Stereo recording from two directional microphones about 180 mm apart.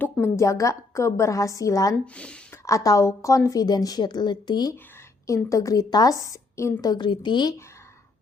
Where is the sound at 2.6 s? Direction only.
20° left (ahead or behind).